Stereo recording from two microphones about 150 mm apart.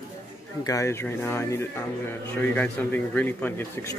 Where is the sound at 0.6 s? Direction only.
20° left (ahead or behind).